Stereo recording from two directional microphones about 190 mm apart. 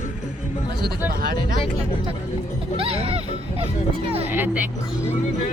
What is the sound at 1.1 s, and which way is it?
Speech, 50° right (ahead or behind).